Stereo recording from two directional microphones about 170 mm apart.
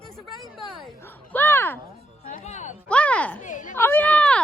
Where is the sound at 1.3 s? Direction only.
10° left (ahead or behind).